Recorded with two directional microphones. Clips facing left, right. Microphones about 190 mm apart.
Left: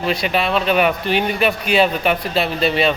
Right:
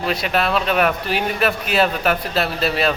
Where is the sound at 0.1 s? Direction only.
Centre (ahead or behind).